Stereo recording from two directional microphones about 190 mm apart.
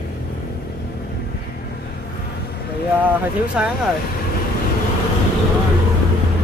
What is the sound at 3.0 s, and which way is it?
Speech, 5° right (ahead or behind).